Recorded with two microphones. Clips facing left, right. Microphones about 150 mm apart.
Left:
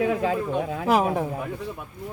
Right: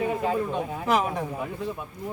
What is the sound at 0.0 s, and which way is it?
Speech, 90° left.